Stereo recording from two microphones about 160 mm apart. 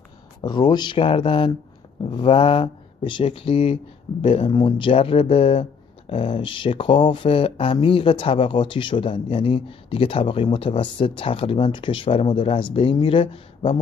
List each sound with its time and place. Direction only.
0.4 s speech: 25° left (ahead or behind)